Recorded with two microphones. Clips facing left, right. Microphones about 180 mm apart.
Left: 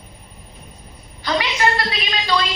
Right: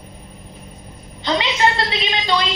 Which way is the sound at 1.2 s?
25° right (ahead or behind).